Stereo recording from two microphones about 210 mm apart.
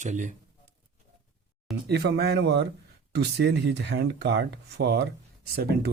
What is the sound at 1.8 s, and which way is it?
Speech, 50° right (ahead or behind).